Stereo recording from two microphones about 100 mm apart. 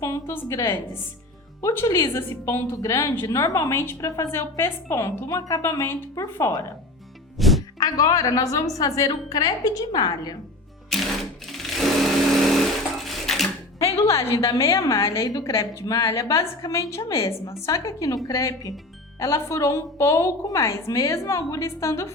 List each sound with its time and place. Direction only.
0.0 s a sound: 35° left (ahead or behind)
0.3 s a woman's voice: 30° left (ahead or behind)
1.7 s a woman's voice: 30° left (ahead or behind)
7.3 s music: centre (ahead or behind)
7.8 s a woman's voice: 35° left (ahead or behind)
10.8 s sewing machine: centre (ahead or behind)
13.0 s a sound: centre (ahead or behind)
14.3 s a woman's voice: 30° left (ahead or behind)